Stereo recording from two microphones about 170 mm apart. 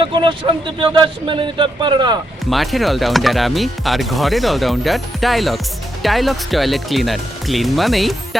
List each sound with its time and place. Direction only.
0.0 s speech: 30° right (ahead or behind)
2.5 s speech: centre (ahead or behind)